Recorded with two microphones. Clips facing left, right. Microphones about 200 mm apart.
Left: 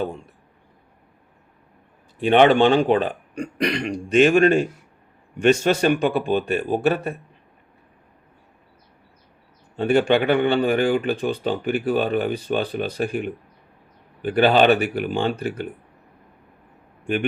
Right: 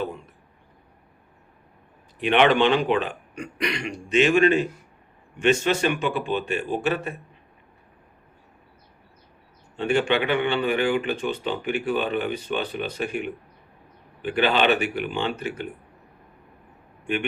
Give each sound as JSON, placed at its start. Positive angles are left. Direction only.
{"t": 2.2, "sound": "a man's voice", "side_deg": 40}
{"t": 3.8, "sound": "a man's voice", "side_deg": 50}
{"t": 9.7, "sound": "a man's voice", "side_deg": 45}